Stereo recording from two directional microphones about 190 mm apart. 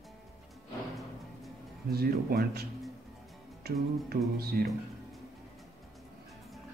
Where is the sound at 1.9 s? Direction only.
55° right (ahead or behind).